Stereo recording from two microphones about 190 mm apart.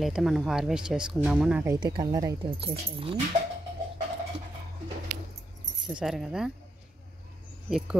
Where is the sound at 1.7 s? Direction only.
20° right (ahead or behind).